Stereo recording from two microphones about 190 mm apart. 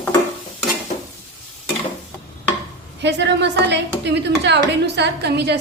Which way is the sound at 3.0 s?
65° right (ahead or behind).